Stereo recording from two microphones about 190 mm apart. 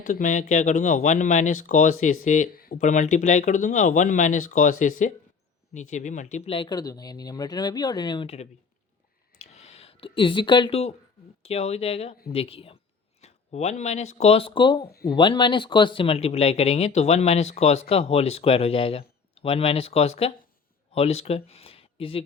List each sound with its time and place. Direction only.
0.1 s speech: 40° left (ahead or behind)
9.4 s a sound: 35° left (ahead or behind)
11.4 s speech: 35° left (ahead or behind)
14.8 s speech: 55° left (ahead or behind)
15.1 s speech: 25° left (ahead or behind)